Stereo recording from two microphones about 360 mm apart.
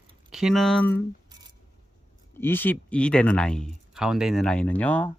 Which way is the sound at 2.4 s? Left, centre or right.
Centre.